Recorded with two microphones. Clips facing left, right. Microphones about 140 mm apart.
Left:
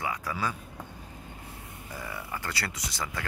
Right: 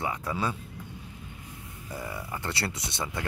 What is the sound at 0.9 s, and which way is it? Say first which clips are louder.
Vehicle: even; 40° left (ahead or behind).